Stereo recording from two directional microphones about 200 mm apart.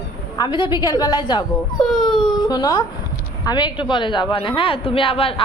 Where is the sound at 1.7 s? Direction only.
Centre (ahead or behind).